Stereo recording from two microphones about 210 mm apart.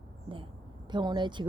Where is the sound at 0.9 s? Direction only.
20° right (ahead or behind).